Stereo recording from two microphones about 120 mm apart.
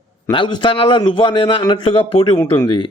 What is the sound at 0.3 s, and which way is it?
A man's voice, 40° left (ahead or behind).